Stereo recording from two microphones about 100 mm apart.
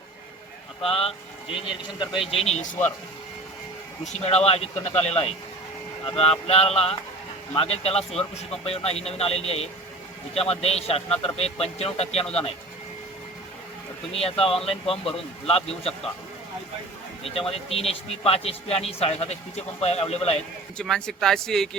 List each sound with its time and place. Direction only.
0.8 s speech: 70° left (ahead or behind)
2.2 s speech: 80° left
4.2 s a man's voice: 90° left
14.1 s speech: 80° left
17.2 s a man's voice: 75° left (ahead or behind)
20.7 s speech: 5° left (ahead or behind)